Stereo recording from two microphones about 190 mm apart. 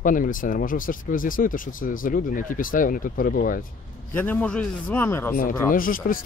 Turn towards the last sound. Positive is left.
turn(degrees=45)  # may be behind; listen again after turning